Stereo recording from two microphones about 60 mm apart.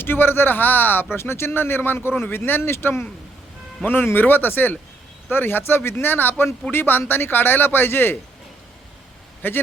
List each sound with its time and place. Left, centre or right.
0.0 s speech: left
9.4 s speech: left